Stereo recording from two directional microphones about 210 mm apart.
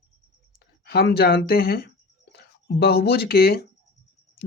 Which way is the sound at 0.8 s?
50° left (ahead or behind).